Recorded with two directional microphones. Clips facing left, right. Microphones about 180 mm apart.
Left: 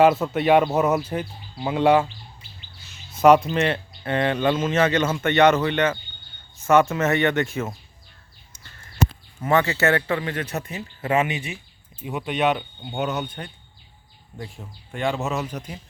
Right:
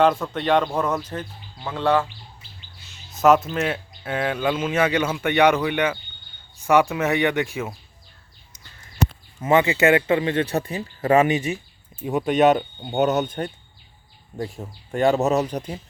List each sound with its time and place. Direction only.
0.0 s speech: 10° left (ahead or behind)
3.2 s speech: centre (ahead or behind)
9.4 s speech: 20° right (ahead or behind); by 15.8 s 35° right (ahead or behind)